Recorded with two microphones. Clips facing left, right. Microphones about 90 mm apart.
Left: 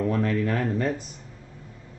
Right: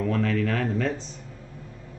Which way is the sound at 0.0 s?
20° left (ahead or behind).